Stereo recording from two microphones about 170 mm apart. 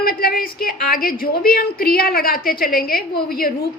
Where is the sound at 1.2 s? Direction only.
60° left (ahead or behind).